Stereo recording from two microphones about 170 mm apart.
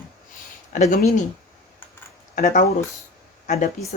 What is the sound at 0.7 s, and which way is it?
Speech, 45° left (ahead or behind).